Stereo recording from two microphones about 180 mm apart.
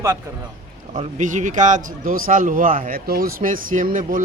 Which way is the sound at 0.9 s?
45° right (ahead or behind).